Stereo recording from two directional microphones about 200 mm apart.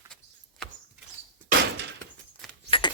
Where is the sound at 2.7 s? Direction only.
20° left (ahead or behind).